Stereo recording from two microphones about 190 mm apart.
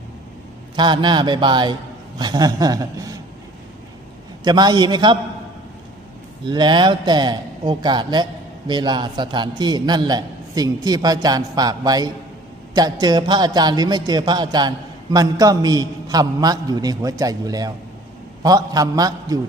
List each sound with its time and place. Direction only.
0.8 s a man's voice: 25° right (ahead or behind)
4.4 s a man's voice: 20° right (ahead or behind)
6.4 s a man's voice: 25° right (ahead or behind)